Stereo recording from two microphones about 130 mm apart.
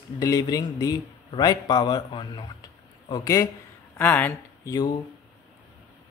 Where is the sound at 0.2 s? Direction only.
30° left (ahead or behind).